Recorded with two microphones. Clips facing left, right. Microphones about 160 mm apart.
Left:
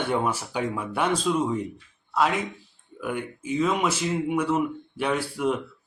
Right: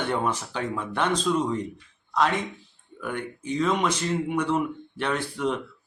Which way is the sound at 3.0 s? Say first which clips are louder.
Left 2 dB; 5° left (ahead or behind).